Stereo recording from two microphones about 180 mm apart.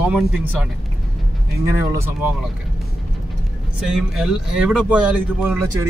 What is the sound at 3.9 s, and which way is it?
Speech, 5° right (ahead or behind).